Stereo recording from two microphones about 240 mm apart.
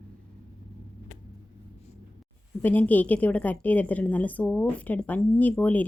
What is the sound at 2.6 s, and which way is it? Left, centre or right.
A woman's voice, centre.